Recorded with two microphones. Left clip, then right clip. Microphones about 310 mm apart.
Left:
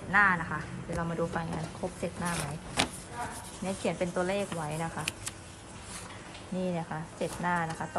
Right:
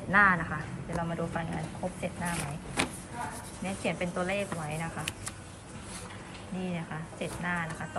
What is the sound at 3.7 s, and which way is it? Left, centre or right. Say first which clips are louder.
Speech: left 1 dB; left.